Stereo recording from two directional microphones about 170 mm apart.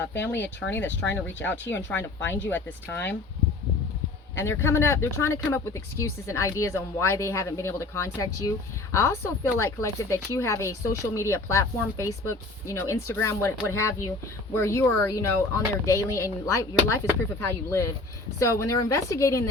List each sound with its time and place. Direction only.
0.0 s speech: 90° left
0.4 s a woman's voice: 10° left (ahead or behind)
4.4 s a woman's voice: 15° left (ahead or behind)